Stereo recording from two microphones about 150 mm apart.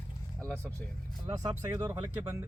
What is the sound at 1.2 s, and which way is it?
Speech, 25° right (ahead or behind).